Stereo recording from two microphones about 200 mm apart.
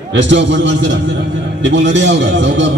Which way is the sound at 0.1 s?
65° right (ahead or behind).